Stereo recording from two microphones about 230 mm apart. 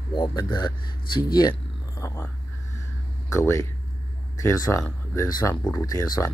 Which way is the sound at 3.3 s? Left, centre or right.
Centre.